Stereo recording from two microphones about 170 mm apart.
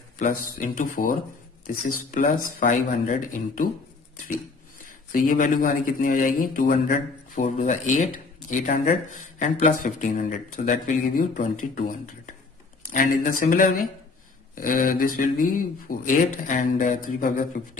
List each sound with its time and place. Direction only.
0.2 s speech: 50° left (ahead or behind)
5.1 s speech: 55° left (ahead or behind)